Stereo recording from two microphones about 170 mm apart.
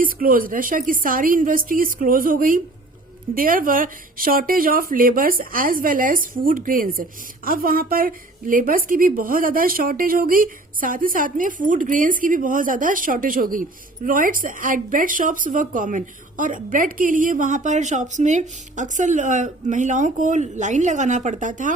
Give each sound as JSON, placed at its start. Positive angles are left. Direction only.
{"t": 0.0, "sound": "a woman's voice", "side_deg": -55}